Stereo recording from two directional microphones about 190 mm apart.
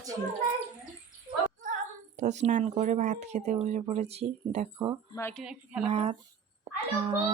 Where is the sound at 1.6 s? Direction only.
40° right (ahead or behind).